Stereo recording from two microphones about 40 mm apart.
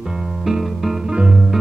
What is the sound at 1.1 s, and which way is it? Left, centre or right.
Music, centre.